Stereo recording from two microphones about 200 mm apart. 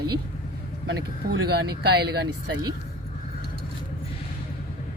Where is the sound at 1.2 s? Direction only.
50° right (ahead or behind).